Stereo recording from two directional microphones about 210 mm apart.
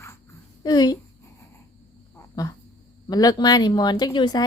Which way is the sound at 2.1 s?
15° left (ahead or behind).